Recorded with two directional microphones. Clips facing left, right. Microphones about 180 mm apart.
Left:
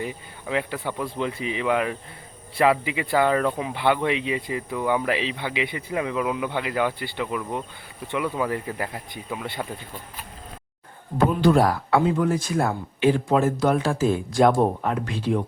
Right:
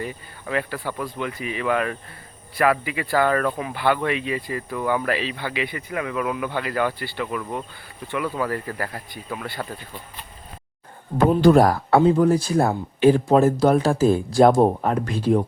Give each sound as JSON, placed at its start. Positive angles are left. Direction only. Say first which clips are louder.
{"t": 0.0, "sound": "speech", "louder": "even", "side_deg": 15}
{"t": 11.3, "sound": "speech", "louder": "right 5 dB", "side_deg": -45}